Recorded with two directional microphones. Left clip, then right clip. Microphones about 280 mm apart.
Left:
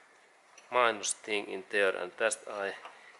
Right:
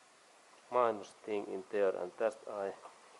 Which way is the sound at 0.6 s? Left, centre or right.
Centre.